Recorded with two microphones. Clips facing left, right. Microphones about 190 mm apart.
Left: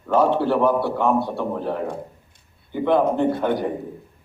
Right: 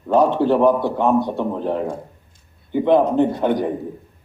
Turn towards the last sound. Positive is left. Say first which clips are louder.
# right 3 dB
turn(degrees=-20)  # may be behind; listen again after turning